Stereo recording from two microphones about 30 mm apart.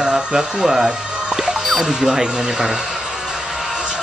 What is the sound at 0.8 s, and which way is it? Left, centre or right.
Music, right.